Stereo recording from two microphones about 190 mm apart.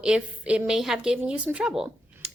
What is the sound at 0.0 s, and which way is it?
A woman's voice, 5° right (ahead or behind).